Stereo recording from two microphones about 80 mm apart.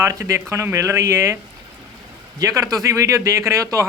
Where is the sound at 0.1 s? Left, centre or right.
Right.